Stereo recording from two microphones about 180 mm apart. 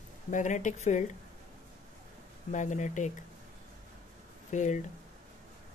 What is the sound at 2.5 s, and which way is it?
Speech, 40° left (ahead or behind).